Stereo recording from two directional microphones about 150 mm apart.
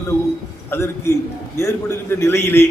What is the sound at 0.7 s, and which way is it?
A man's voice, 20° left (ahead or behind).